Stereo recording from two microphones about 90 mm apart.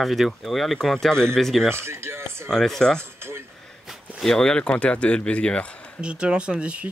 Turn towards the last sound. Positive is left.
turn(degrees=-10)  # may be behind; listen again after turning